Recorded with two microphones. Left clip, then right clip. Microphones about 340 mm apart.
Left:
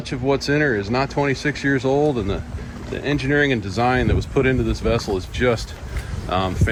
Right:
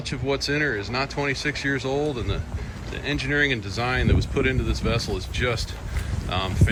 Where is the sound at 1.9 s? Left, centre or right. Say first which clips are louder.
Left 7 dB; left.